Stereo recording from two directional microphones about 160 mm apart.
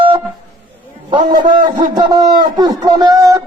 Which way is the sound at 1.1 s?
30° right (ahead or behind).